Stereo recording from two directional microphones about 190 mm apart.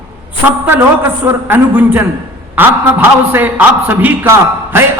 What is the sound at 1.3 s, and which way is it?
A man's voice, 10° right (ahead or behind).